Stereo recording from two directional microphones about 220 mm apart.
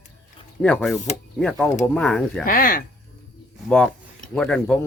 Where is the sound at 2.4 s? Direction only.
40° left (ahead or behind).